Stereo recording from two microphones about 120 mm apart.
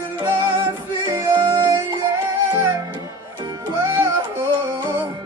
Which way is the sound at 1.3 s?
40° right (ahead or behind).